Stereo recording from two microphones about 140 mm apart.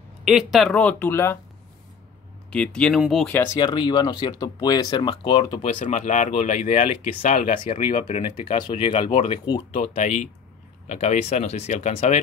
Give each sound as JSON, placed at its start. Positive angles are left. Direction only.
{"t": 0.2, "sound": "speech", "side_deg": 0}
{"t": 2.5, "sound": "speech", "side_deg": 5}
{"t": 3.5, "sound": "speech", "side_deg": 30}
{"t": 5.7, "sound": "speech", "side_deg": 60}
{"t": 8.6, "sound": "speech", "side_deg": 35}
{"t": 9.7, "sound": "speech", "side_deg": 50}